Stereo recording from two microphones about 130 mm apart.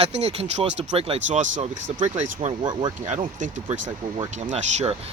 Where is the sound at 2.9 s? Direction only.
70° right (ahead or behind).